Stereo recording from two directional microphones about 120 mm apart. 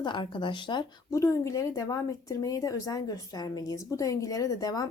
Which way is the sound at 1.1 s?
25° left (ahead or behind).